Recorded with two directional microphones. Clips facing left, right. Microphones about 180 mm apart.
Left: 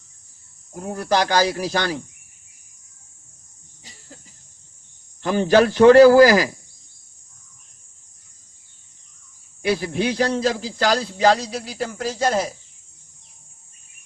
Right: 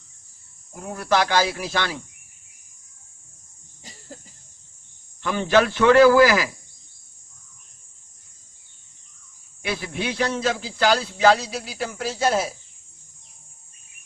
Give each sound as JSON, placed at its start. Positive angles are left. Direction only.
{"t": 0.9, "sound": "a man's voice", "side_deg": 40}
{"t": 5.2, "sound": "a man's voice", "side_deg": 40}
{"t": 9.6, "sound": "a man's voice", "side_deg": 40}
{"t": 11.4, "sound": "speech", "side_deg": -5}